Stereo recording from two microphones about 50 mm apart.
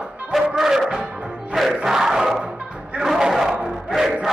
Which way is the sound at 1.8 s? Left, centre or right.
Centre.